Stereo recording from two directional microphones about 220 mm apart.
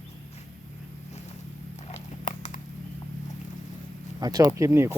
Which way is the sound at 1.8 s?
30° left (ahead or behind).